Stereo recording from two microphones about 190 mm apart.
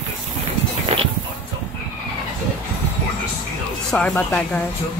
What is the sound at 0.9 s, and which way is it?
Music, 30° right (ahead or behind).